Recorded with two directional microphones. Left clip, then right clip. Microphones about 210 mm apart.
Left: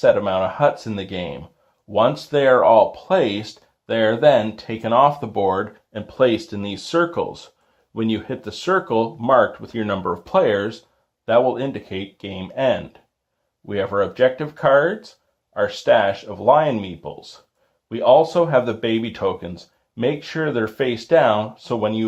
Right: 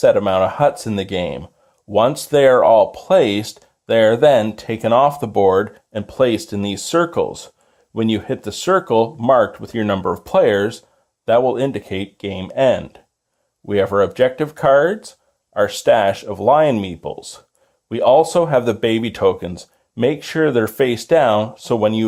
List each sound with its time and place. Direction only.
0.0 s speech: 45° right (ahead or behind)